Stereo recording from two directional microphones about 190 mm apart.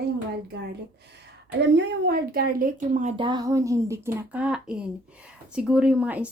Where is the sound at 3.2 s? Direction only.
25° right (ahead or behind).